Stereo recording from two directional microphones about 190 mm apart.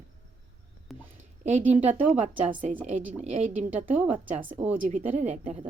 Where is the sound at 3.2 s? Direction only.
35° right (ahead or behind).